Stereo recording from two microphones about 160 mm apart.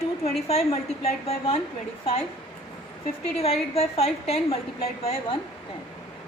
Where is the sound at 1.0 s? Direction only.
40° left (ahead or behind).